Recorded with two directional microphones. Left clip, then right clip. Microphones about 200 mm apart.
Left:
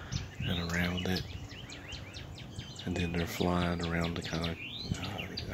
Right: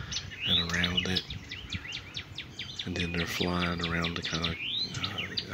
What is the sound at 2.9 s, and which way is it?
Speech, centre (ahead or behind).